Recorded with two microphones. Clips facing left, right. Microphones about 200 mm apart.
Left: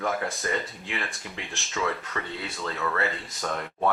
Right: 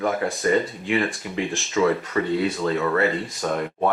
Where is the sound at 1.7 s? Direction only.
15° right (ahead or behind).